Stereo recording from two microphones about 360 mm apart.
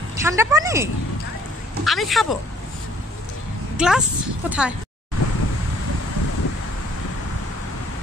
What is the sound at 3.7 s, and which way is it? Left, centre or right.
Speech, centre.